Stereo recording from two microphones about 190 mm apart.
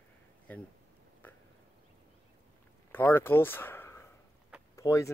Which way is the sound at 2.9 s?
10° left (ahead or behind).